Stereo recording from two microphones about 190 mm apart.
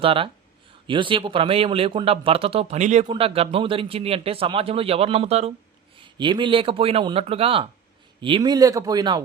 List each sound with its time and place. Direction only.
0.0 s a man's voice: 30° right (ahead or behind)